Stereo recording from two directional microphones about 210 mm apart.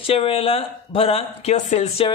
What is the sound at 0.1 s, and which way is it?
Speech, 25° left (ahead or behind).